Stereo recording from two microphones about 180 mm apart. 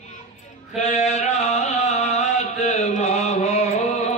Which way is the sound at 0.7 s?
40° left (ahead or behind).